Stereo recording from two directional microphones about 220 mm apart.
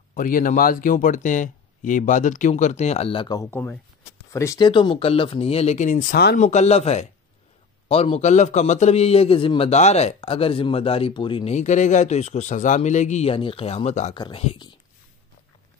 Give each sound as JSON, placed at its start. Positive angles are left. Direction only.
{"t": 0.1, "sound": "a man's voice", "side_deg": 40}
{"t": 6.4, "sound": "a man's voice", "side_deg": 30}